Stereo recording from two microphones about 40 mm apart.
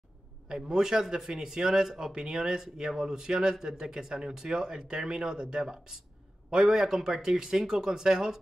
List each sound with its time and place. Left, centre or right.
0.5 s speech: centre